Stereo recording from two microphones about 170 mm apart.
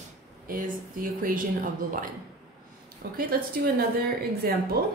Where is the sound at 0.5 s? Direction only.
55° right (ahead or behind).